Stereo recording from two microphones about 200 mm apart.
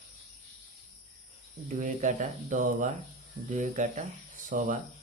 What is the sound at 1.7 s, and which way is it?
Speech, 40° right (ahead or behind).